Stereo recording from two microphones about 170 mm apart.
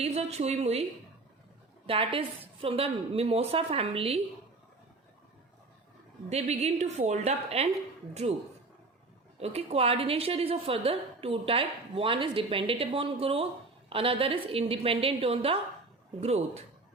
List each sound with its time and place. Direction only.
0.0 s a woman's voice: 40° right (ahead or behind)
1.9 s a woman's voice: 30° right (ahead or behind)
6.3 s a woman's voice: 40° right (ahead or behind)
9.4 s a woman's voice: 40° right (ahead or behind)